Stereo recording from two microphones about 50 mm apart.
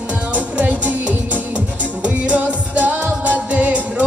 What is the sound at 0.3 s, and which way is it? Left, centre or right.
Music, right.